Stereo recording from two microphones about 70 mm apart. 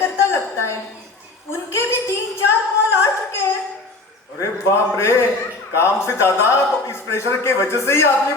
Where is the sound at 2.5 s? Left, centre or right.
Left.